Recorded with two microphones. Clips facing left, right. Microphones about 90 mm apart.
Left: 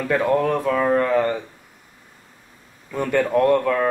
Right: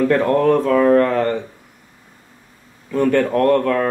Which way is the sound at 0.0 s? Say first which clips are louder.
Right 4 dB; 5° left (ahead or behind).